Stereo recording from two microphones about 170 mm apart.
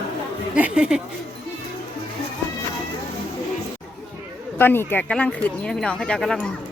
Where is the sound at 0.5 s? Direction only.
5° right (ahead or behind).